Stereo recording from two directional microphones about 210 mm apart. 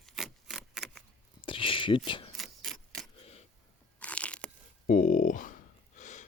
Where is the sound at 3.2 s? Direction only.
30° left (ahead or behind).